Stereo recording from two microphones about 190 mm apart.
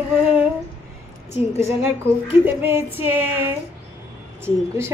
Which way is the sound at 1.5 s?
15° right (ahead or behind).